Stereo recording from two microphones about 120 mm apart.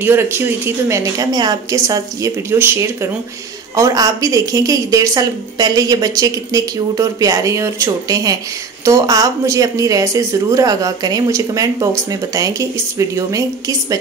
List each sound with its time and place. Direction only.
0.0 s speech: 20° right (ahead or behind)